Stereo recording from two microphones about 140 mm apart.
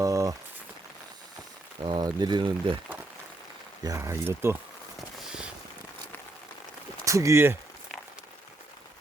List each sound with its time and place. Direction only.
0.0 s rain on surface: 25° right (ahead or behind)
1.8 s speech: 30° right (ahead or behind)
3.8 s speech: 20° right (ahead or behind)
4.9 s a sound: 5° right (ahead or behind)
7.0 s speech: 25° right (ahead or behind)